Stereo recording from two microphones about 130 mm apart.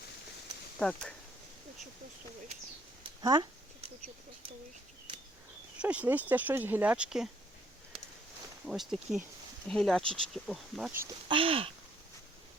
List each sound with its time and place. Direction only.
0.8 s speech: 5° left (ahead or behind)
3.0 s a sound: 35° right (ahead or behind)
5.8 s speech: 10° right (ahead or behind)
8.6 s speech: 5° right (ahead or behind)
11.3 s speech: 45° right (ahead or behind)